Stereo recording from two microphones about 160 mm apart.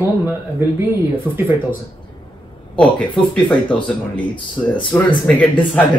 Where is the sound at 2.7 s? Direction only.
10° left (ahead or behind).